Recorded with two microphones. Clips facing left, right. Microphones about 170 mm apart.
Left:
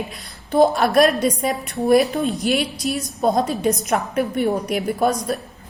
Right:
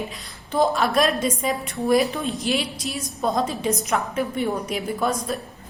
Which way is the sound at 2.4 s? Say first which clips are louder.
Left 4 dB; 60° left (ahead or behind).